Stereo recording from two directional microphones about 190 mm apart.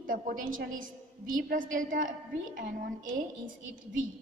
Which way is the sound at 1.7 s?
45° right (ahead or behind).